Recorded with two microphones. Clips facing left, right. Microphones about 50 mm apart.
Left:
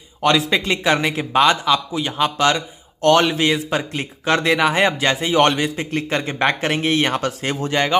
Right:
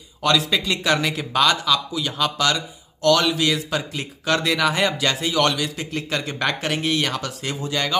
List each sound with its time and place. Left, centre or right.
0.2 s speech: left